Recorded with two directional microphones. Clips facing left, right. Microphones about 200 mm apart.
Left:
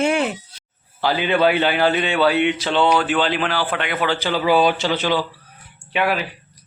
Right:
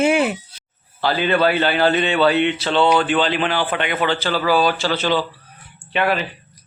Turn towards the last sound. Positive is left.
turn(degrees=5)  # may be behind; listen again after turning